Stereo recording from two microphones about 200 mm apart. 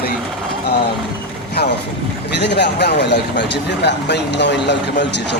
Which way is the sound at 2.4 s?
55° left (ahead or behind).